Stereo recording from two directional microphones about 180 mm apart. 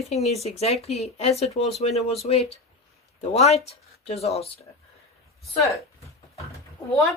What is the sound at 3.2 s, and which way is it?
Speech, 35° left (ahead or behind).